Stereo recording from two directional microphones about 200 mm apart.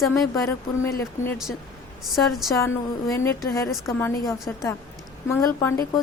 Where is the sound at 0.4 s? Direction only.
15° left (ahead or behind).